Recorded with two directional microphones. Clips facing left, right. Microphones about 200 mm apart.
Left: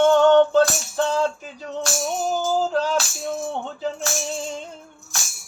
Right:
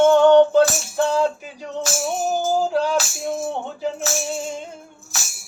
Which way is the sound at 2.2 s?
10° right (ahead or behind).